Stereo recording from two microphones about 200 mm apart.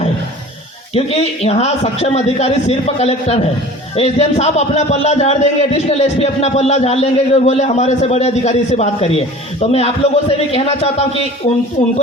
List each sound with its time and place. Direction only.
0.9 s a man's voice: 30° left (ahead or behind)